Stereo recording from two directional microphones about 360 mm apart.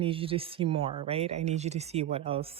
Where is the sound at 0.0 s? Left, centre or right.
Centre.